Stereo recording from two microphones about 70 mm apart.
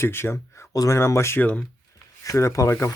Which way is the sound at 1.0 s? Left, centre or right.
Left.